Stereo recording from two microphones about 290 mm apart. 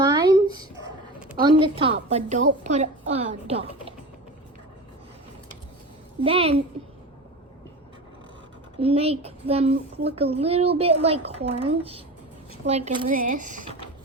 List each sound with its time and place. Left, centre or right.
0.1 s a sound: centre
1.4 s a woman's voice: centre
6.2 s a woman's voice: centre
8.8 s a woman's voice: centre